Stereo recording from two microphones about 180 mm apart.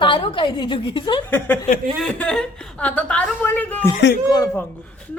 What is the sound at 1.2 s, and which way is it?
A woman's voice, 10° left (ahead or behind).